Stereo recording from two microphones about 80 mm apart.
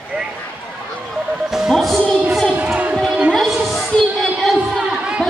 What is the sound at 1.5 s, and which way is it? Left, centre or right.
Speech, centre.